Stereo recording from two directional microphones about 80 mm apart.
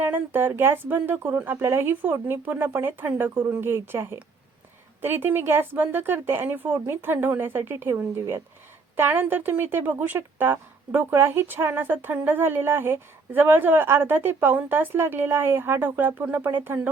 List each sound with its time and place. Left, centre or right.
0.0 s speech: right